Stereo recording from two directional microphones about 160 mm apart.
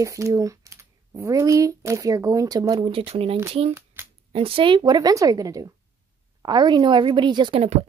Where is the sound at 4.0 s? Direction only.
15° right (ahead or behind).